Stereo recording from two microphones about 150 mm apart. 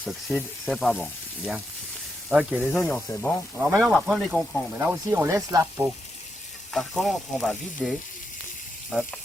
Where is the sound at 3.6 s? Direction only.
5° right (ahead or behind).